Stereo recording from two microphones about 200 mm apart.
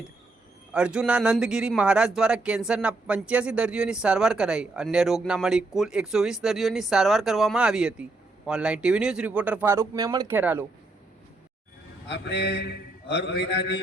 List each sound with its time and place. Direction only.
0.7 s speech: 5° right (ahead or behind)
12.0 s a man's voice: 60° left (ahead or behind)